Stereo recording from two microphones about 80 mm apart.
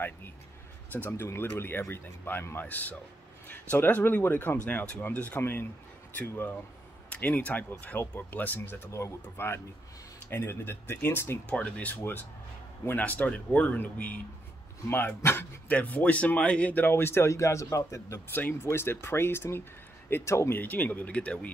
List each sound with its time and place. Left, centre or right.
1.1 s speech: left
11.4 s speech: centre; by 18.2 s left
18.3 s speech: left